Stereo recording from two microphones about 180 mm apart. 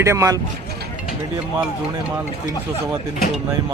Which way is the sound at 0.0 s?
15° right (ahead or behind).